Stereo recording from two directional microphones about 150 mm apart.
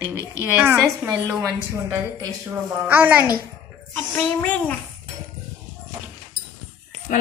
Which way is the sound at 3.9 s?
15° left (ahead or behind).